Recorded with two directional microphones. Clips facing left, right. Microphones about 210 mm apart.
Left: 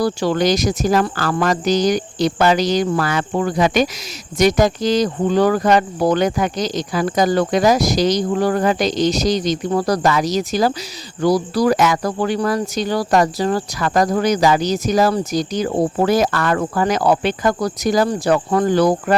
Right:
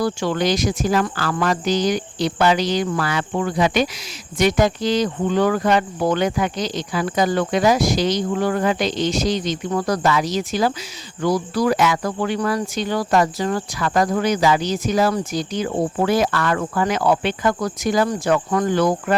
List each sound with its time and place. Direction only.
0.0 s speech: 35° left (ahead or behind)
3.1 s cricket: 45° left (ahead or behind)
4.4 s speech: 40° left (ahead or behind)